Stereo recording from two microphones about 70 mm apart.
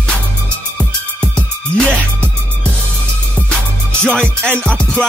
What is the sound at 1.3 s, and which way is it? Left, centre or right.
Music, centre.